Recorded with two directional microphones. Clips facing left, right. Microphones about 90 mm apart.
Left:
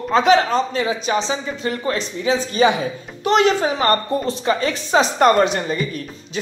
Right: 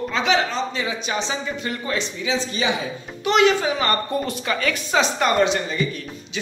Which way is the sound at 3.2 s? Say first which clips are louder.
Left 2 dB; 40° left (ahead or behind).